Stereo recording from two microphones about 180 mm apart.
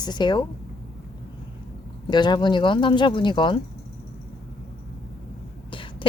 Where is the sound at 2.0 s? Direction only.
25° left (ahead or behind).